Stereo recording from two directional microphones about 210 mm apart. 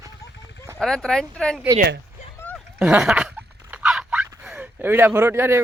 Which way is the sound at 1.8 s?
50° right (ahead or behind).